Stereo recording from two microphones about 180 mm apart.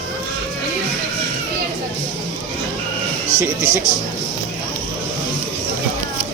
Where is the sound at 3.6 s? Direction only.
15° left (ahead or behind).